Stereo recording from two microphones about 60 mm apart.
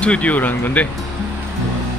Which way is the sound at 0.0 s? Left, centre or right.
Left.